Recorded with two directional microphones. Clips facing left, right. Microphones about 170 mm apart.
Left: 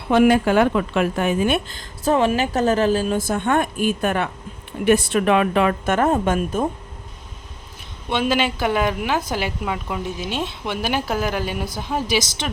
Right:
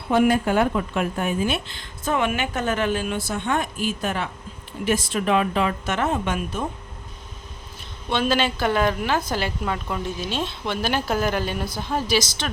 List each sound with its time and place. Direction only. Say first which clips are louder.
0.1 s a woman's voice: left 4 dB; 90° left
1.5 s a woman's voice: left 5 dB; 50° left (ahead or behind)
8.1 s a woman's voice: left 1 dB; 15° left (ahead or behind)